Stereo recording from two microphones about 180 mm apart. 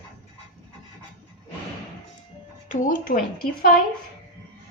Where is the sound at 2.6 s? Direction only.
45° left (ahead or behind).